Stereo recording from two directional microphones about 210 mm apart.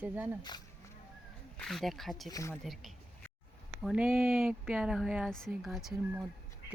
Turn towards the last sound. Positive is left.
turn(degrees=-5)  # may be behind; listen again after turning